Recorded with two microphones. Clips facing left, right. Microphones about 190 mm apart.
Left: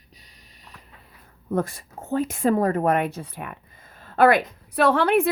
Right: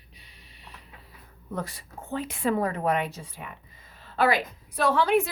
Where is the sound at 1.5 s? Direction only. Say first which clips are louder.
Left 9 dB; 50° left (ahead or behind).